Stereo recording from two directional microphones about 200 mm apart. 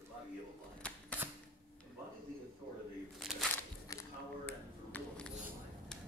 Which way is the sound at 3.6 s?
15° left (ahead or behind).